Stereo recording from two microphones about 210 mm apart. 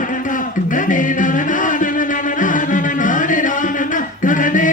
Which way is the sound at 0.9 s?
40° left (ahead or behind).